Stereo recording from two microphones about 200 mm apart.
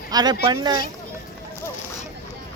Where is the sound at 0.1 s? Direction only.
20° right (ahead or behind).